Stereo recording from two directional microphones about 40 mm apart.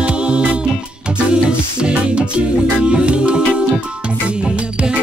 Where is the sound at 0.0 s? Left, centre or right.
Right.